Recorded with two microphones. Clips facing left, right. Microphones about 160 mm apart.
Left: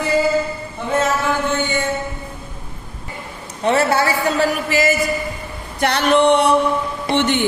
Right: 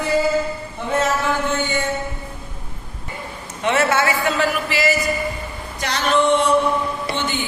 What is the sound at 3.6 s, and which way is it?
A man's voice, 35° left (ahead or behind).